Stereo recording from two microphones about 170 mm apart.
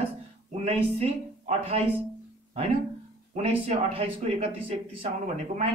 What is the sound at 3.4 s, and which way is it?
Speech, 35° right (ahead or behind).